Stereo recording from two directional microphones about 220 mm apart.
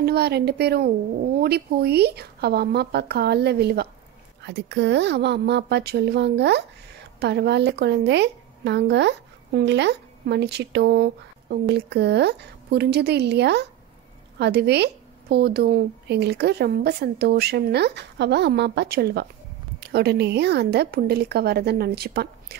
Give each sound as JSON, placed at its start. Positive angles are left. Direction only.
{"t": 0.0, "sound": "a woman's voice", "side_deg": -50}